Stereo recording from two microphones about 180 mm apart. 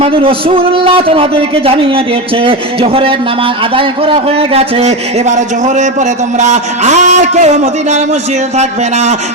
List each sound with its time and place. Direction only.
0.0 s a man's voice: 30° right (ahead or behind)